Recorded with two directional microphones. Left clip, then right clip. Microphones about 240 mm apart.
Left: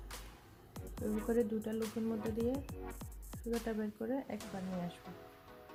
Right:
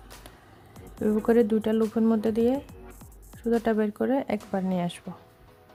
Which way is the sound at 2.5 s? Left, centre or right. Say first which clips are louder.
Right 11 dB; centre.